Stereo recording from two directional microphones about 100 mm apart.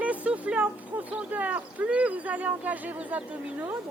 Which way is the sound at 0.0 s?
15° right (ahead or behind).